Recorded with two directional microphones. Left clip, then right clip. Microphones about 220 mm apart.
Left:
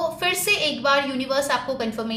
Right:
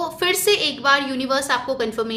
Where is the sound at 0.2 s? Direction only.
40° right (ahead or behind).